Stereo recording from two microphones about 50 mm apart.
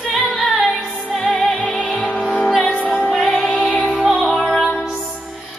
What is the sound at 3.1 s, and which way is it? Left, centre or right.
Music, centre.